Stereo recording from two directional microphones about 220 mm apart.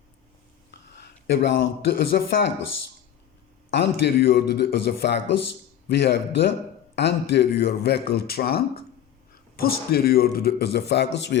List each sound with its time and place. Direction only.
1.4 s speech: 55° left (ahead or behind)
3.7 s speech: 50° left (ahead or behind)